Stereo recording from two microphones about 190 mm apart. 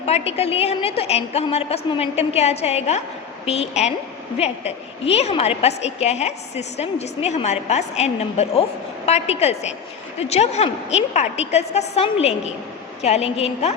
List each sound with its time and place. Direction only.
0.0 s a woman's voice: 35° left (ahead or behind)